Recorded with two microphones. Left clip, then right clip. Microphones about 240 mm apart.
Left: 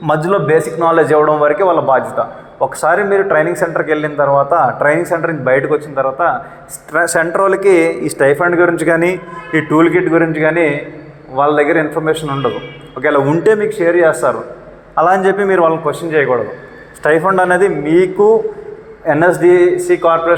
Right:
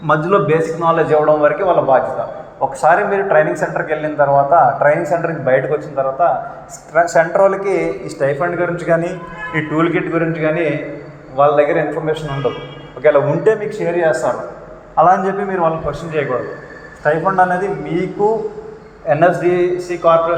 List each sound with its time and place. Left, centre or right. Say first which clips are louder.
0.0 s a man's voice: even; left
19.0 s a man's voice: left 3 dB; left